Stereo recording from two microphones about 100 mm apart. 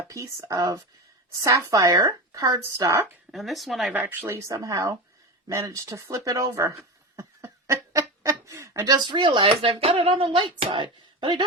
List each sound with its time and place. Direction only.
0.1 s speech: 35° right (ahead or behind)
3.3 s speech: centre (ahead or behind)
4.0 s speech: 30° right (ahead or behind)
5.5 s a sound: 30° right (ahead or behind)
9.0 s speech: 50° right (ahead or behind)